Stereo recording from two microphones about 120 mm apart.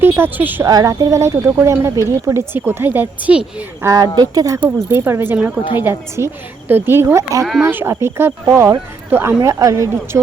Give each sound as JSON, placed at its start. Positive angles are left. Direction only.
{"t": 0.0, "sound": "a woman's voice", "side_deg": -20}
{"t": 0.7, "sound": "speech", "side_deg": -30}
{"t": 3.8, "sound": "speech", "side_deg": -30}